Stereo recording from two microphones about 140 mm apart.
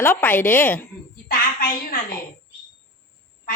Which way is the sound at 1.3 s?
90° left.